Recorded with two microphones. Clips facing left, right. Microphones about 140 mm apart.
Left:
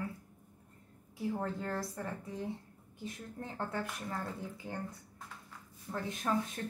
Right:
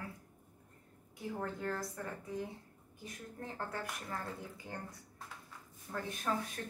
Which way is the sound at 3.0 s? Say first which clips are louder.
Left 3 dB; 25° left (ahead or behind).